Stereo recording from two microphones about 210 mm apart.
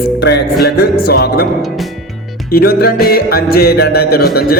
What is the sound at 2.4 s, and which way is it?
Music, 45° left (ahead or behind).